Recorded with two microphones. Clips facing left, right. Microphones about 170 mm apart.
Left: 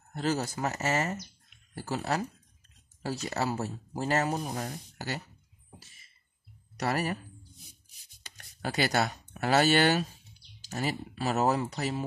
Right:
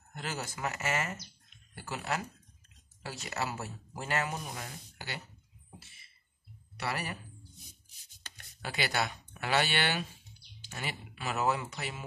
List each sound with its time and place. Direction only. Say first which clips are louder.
0.1 s speech: left 9 dB; 35° left (ahead or behind)
6.8 s speech: left 7 dB; 45° left (ahead or behind)
8.4 s speech: left 6 dB; 40° left (ahead or behind)